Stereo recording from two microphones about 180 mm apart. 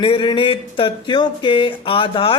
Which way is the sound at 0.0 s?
30° left (ahead or behind).